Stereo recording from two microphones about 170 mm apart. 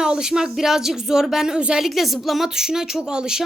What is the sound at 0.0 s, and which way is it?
Speech, 5° right (ahead or behind).